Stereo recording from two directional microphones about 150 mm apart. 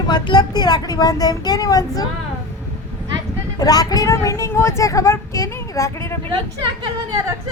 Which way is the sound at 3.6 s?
25° left (ahead or behind).